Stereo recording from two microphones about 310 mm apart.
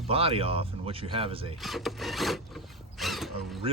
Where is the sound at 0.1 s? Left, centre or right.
Centre.